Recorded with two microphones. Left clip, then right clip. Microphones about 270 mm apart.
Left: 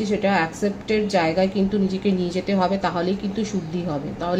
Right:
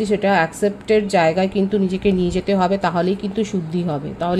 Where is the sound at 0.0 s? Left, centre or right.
Right.